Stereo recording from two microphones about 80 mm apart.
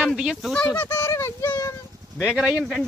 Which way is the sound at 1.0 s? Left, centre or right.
Left.